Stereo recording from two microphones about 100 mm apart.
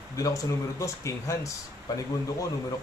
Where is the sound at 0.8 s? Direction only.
30° left (ahead or behind).